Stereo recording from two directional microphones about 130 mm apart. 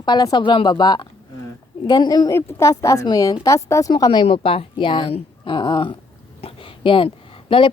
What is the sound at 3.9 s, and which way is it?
Speech, 35° left (ahead or behind).